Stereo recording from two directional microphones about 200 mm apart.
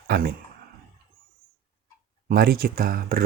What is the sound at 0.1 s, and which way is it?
Speech, 50° right (ahead or behind).